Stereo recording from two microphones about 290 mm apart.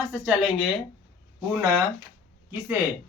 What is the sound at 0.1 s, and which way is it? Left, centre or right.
Speech, centre.